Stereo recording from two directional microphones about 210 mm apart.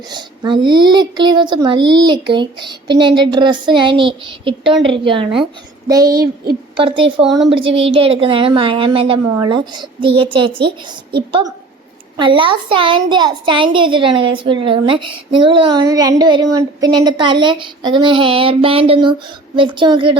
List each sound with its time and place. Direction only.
0.1 s a woman's voice: 20° right (ahead or behind)